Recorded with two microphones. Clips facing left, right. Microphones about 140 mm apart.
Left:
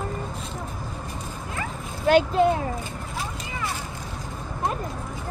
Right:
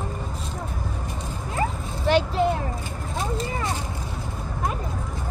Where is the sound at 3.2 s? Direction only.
30° right (ahead or behind).